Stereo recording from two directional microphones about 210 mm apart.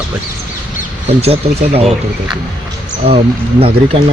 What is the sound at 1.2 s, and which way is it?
Speech, 30° right (ahead or behind).